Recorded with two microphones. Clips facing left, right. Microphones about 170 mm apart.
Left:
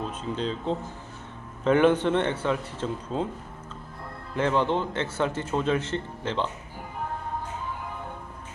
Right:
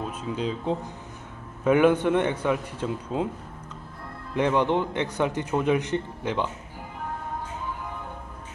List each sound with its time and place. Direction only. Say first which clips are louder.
0.0 s a man's voice: right 1 dB; 10° right (ahead or behind)
4.4 s a man's voice: right 2 dB; 15° right (ahead or behind)